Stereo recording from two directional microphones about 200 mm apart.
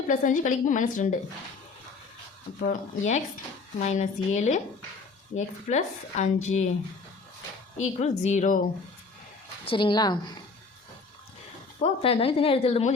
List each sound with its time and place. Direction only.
0.1 s a woman's voice: 40° left (ahead or behind)
2.6 s a woman's voice: 35° left (ahead or behind)
7.8 s a woman's voice: 35° left (ahead or behind)
9.6 s speech: 25° left (ahead or behind)
11.8 s speech: 30° left (ahead or behind)